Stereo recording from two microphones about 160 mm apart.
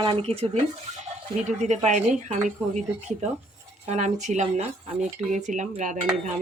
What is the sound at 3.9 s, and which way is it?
Speech, 45° right (ahead or behind).